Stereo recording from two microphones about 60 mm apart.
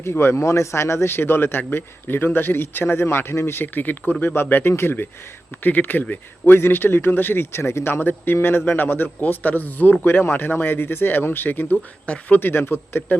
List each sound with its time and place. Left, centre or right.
0.0 s a man's voice: left
7.9 s a man's voice: left
12.0 s speech: left
12.4 s a man's voice: left